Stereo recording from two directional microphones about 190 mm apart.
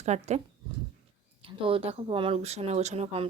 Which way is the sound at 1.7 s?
30° right (ahead or behind).